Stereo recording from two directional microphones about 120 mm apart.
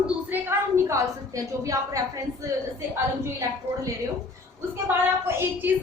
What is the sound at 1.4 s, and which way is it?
Speech, 30° right (ahead or behind).